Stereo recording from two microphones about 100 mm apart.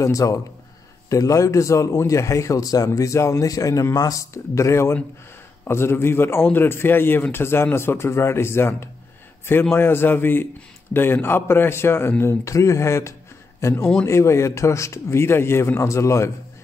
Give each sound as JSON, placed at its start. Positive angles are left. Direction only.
{"t": 0.0, "sound": "a man's voice", "side_deg": 35}